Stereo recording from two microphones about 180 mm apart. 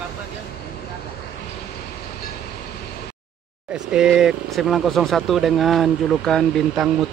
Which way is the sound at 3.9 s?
5° right (ahead or behind).